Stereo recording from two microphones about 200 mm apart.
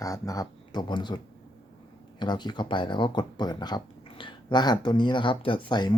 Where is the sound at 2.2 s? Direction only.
20° left (ahead or behind).